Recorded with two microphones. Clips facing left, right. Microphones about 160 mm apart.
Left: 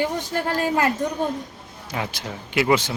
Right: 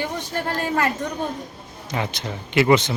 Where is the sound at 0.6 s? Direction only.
10° left (ahead or behind).